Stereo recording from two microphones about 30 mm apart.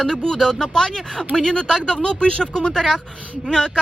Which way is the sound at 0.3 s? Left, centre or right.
Centre.